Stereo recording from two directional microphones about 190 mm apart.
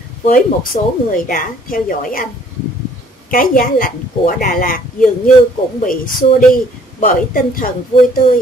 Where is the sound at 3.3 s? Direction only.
50° left (ahead or behind).